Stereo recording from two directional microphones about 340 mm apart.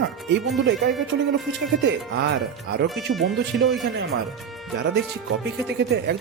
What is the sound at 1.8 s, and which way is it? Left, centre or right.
Speech, right.